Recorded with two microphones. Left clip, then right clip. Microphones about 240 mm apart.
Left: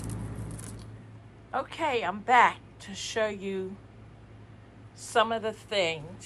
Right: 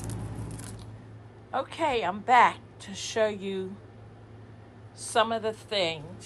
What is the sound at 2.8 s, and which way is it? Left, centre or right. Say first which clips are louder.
Speech: right 3 dB; right.